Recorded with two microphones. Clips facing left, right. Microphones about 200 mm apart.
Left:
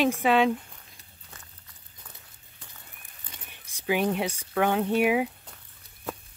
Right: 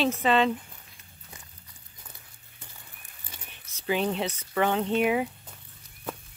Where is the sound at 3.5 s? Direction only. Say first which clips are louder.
Left 1 dB; 15° left (ahead or behind).